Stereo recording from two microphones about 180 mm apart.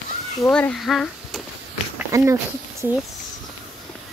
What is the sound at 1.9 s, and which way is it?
Speech, 15° right (ahead or behind).